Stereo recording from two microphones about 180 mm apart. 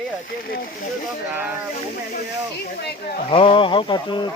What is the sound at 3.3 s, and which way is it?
Speech, 30° left (ahead or behind).